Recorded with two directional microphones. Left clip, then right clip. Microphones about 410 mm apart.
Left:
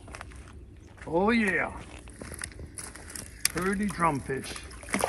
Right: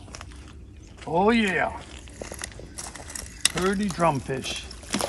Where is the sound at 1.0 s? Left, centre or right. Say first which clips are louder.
Right 4 dB; centre.